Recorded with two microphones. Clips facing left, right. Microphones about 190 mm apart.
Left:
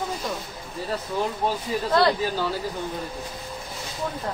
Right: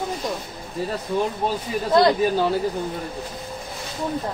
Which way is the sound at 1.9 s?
15° right (ahead or behind).